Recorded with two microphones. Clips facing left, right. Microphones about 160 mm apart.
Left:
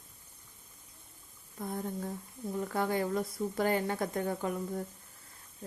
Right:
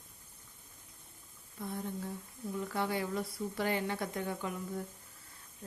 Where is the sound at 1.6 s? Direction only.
50° left (ahead or behind).